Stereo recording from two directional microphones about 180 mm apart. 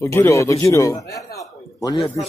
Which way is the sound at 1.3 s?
20° left (ahead or behind).